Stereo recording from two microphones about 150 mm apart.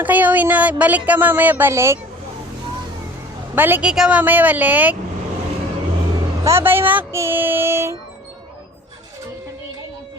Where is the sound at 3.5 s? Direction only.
10° right (ahead or behind).